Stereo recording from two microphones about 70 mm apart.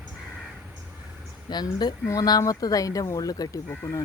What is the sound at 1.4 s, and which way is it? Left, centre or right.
Speech, left.